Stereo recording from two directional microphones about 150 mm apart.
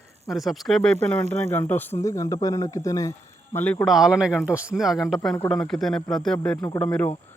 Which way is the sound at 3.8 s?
Centre (ahead or behind).